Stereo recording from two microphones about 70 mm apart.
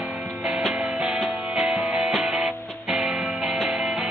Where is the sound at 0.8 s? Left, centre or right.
Centre.